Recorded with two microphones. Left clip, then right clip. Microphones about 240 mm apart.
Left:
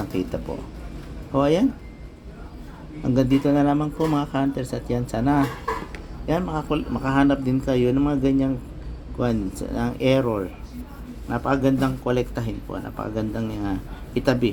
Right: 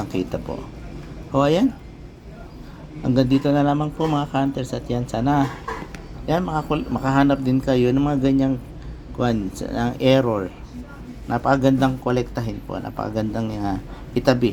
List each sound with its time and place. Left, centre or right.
0.1 s speech: centre
3.0 s speech: centre